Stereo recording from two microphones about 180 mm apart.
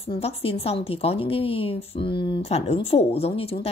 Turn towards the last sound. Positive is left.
turn(degrees=35)  # may be behind; listen again after turning